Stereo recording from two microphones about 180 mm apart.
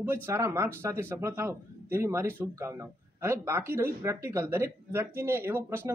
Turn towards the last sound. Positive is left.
turn(degrees=-15)  # may be behind; listen again after turning